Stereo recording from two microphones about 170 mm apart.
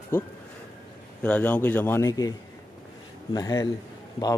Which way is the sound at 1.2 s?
10° left (ahead or behind).